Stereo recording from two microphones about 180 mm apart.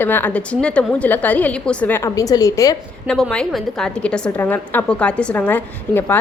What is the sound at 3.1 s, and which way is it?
A woman's voice, 5° left (ahead or behind).